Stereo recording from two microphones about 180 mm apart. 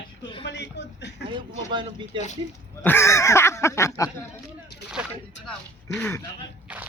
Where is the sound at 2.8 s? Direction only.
15° left (ahead or behind).